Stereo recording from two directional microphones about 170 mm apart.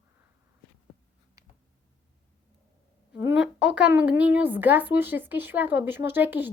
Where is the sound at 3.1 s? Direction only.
10° right (ahead or behind).